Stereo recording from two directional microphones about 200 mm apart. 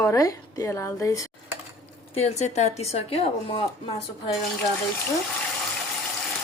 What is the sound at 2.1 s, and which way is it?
A woman's voice, 35° left (ahead or behind).